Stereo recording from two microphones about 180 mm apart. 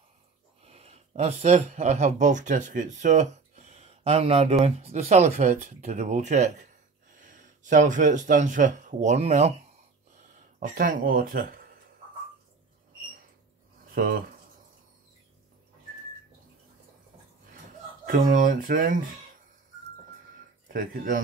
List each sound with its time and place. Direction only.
0.7 s speech: 35° right (ahead or behind)
10.6 s speech: 45° right (ahead or behind)
13.9 s speech: 50° right (ahead or behind)
18.0 s speech: 45° right (ahead or behind)
20.6 s speech: 50° right (ahead or behind)